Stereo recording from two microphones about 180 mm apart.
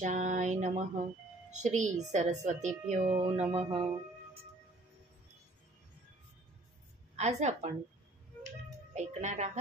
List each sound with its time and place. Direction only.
0.0 s a sound: 45° right (ahead or behind)
1.6 s a woman's voice: 40° right (ahead or behind)
3.4 s speech: 30° right (ahead or behind)
7.2 s a woman's voice: 40° right (ahead or behind)
8.9 s speech: 40° right (ahead or behind)